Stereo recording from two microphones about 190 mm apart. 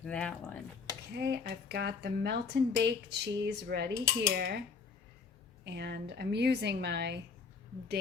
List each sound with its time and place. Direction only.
0.0 s speech: 5° left (ahead or behind)
1.1 s speech: 60° right (ahead or behind)
5.6 s speech: 60° right (ahead or behind)